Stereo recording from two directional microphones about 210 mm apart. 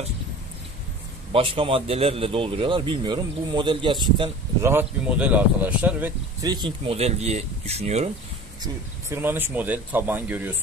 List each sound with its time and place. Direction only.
1.3 s speech: 25° right (ahead or behind)
4.7 s speech: 5° right (ahead or behind); by 8.1 s 30° right (ahead or behind)
9.1 s speech: 10° right (ahead or behind)